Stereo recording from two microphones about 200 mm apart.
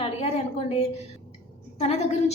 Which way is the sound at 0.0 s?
30° left (ahead or behind).